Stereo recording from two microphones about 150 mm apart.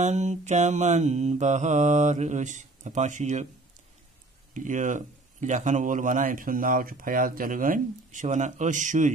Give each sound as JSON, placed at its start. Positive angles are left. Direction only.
{"t": 0.0, "sound": "mantra", "side_deg": -50}
{"t": 4.6, "sound": "speech", "side_deg": -60}